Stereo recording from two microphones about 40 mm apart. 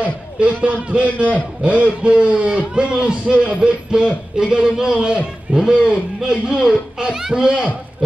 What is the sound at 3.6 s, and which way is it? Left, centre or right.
A man's voice, right.